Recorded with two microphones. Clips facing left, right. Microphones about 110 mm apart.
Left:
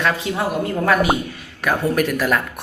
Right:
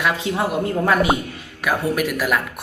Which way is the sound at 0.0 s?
20° right (ahead or behind).